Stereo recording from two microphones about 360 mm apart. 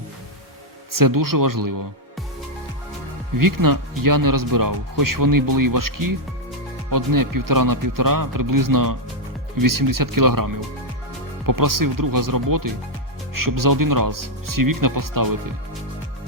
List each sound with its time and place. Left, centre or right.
0.9 s speech: right
3.3 s speech: right